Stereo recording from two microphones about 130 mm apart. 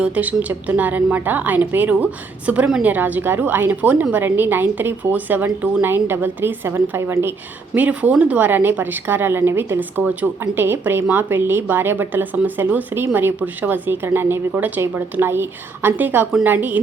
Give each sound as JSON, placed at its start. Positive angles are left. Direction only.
{"t": 0.0, "sound": "a woman's voice", "side_deg": -10}